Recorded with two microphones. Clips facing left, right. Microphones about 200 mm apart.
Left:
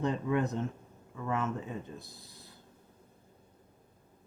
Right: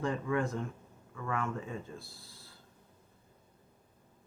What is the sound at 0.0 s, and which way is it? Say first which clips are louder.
Speech: left 2 dB; 20° left (ahead or behind).